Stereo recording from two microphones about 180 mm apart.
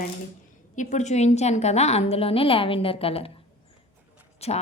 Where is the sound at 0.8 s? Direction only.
40° left (ahead or behind).